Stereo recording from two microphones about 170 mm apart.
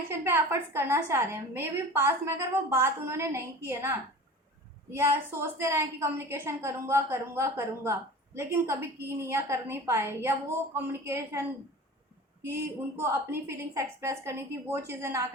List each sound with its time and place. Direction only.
0.1 s a woman's voice: 15° right (ahead or behind)
13.0 s a woman's voice: 15° right (ahead or behind)